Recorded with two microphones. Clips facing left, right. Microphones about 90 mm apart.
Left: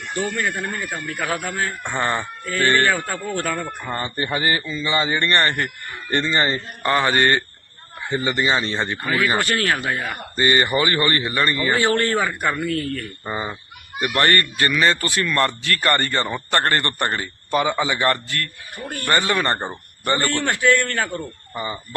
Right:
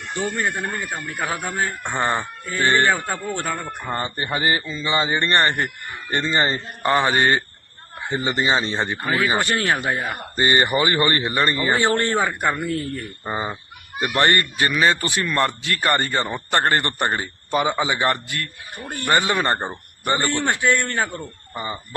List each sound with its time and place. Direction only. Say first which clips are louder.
0.3 s speech: even; 20° right (ahead or behind)